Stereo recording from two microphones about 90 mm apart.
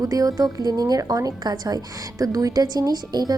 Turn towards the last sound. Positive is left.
turn(degrees=-50)  # may be behind; listen again after turning